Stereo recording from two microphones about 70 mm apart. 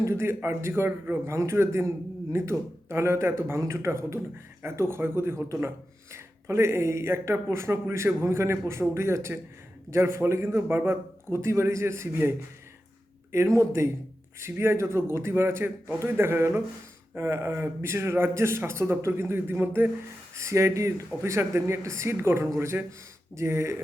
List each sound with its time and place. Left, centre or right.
0.1 s speech: right
1.2 s speech: right
13.3 s speech: right
20.3 s speech: right